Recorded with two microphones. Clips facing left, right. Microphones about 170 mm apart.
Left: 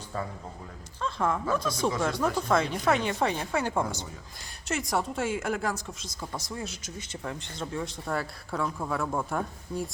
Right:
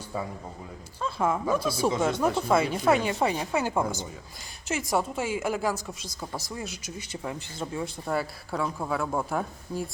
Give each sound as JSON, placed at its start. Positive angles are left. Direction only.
{"t": 1.0, "sound": "speech", "side_deg": -10}
{"t": 1.9, "sound": "speech", "side_deg": -20}
{"t": 2.4, "sound": "speech", "side_deg": -10}
{"t": 7.1, "sound": "speech", "side_deg": -10}